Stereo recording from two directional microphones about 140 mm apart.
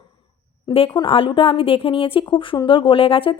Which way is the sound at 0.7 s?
40° left (ahead or behind).